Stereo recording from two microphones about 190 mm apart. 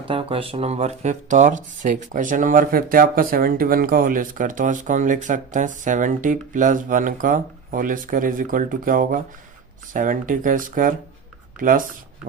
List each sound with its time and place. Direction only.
0.1 s speech: 30° right (ahead or behind); by 11.9 s 45° right (ahead or behind)